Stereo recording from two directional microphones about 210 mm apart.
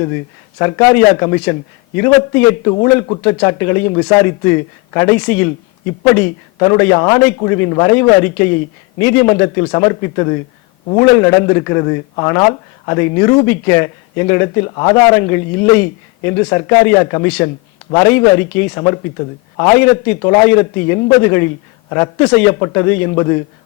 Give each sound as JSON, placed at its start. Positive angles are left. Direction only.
{"t": 0.6, "sound": "a man's voice", "side_deg": 10}